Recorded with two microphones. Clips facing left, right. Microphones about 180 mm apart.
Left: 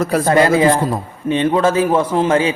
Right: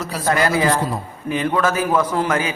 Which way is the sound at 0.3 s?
25° left (ahead or behind).